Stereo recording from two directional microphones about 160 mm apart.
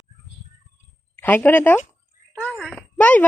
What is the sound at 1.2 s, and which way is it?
Speech, 10° left (ahead or behind).